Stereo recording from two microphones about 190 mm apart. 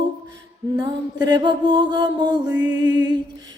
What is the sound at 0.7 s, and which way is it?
Music, 20° right (ahead or behind).